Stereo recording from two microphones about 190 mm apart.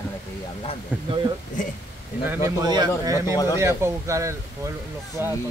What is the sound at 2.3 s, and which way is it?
Speech, 20° right (ahead or behind).